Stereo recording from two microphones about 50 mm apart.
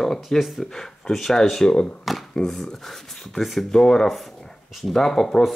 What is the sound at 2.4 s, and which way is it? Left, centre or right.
Speech, centre.